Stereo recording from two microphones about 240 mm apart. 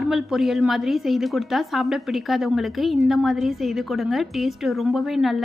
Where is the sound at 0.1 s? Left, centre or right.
Centre.